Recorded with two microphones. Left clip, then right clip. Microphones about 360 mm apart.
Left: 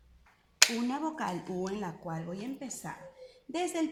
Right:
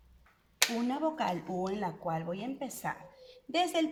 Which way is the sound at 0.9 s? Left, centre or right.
Right.